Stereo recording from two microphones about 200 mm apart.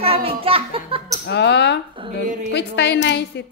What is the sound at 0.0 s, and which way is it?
Hands, 30° right (ahead or behind).